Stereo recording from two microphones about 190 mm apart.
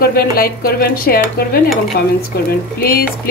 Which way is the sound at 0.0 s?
50° left (ahead or behind).